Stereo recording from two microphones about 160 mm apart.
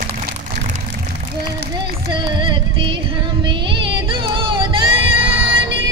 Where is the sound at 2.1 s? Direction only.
30° right (ahead or behind).